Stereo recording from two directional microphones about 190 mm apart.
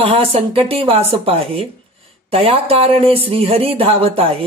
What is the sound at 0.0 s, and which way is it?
Speech, 30° right (ahead or behind).